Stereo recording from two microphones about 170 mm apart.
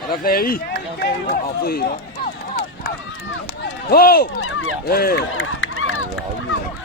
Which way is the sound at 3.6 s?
65° left (ahead or behind).